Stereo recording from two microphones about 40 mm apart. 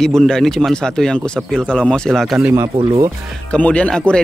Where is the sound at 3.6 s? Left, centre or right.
Left.